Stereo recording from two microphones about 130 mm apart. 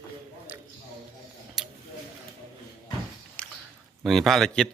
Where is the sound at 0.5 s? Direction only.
15° right (ahead or behind).